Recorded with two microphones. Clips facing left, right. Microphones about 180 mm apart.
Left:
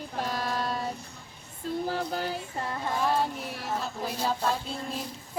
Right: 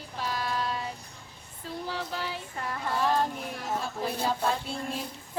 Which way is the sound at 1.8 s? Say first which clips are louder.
Left 1 dB; 45° left (ahead or behind).